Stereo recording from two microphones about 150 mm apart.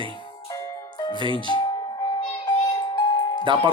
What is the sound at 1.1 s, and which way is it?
Speech, 30° right (ahead or behind).